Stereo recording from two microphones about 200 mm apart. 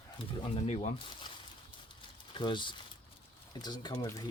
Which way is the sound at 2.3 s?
25° left (ahead or behind).